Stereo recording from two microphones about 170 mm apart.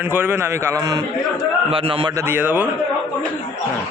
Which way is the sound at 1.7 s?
30° right (ahead or behind).